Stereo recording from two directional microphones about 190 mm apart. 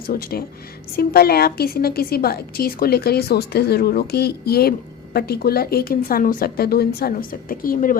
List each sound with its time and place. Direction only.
0.1 s a woman's voice: 50° left (ahead or behind)